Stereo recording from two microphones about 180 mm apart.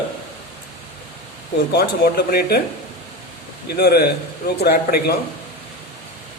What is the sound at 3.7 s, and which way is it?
Speech, 60° left (ahead or behind).